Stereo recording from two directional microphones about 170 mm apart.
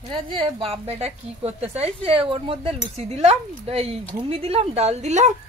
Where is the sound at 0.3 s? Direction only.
30° right (ahead or behind).